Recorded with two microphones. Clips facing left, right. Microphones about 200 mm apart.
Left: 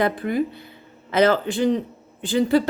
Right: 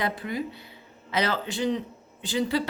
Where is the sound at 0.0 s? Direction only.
55° left (ahead or behind).